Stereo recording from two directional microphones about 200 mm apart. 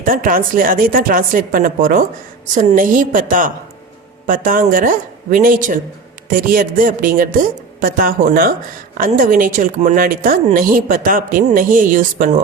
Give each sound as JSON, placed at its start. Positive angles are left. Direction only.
{"t": 0.0, "sound": "a woman's voice", "side_deg": -45}